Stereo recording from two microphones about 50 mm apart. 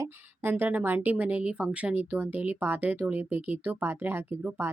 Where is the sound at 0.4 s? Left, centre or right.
Right.